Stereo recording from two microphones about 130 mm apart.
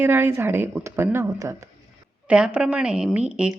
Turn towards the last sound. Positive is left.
turn(degrees=-10)  # may be behind; listen again after turning